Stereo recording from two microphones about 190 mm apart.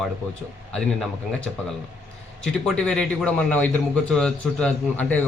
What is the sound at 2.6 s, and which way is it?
A man's voice, 5° left (ahead or behind).